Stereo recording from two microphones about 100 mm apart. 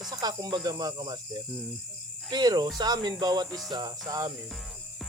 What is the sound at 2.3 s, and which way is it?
Speech, 40° right (ahead or behind).